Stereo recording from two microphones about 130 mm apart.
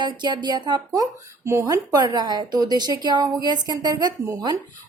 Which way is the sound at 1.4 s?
25° right (ahead or behind).